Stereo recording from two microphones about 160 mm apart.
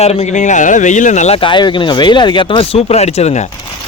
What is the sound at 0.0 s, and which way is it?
Speech, 40° left (ahead or behind).